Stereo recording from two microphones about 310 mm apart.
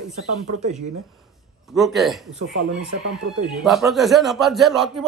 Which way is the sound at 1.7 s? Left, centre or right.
Centre.